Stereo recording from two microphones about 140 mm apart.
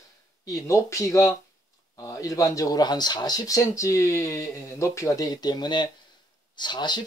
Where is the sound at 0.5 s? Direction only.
20° left (ahead or behind).